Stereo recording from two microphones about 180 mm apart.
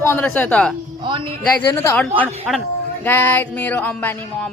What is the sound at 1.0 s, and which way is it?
Speech, 25° right (ahead or behind).